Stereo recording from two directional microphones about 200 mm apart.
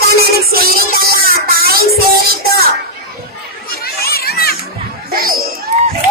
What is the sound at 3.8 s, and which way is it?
Children playing, 50° left (ahead or behind).